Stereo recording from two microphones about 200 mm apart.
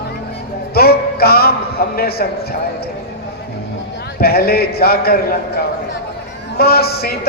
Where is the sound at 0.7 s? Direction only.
50° left (ahead or behind).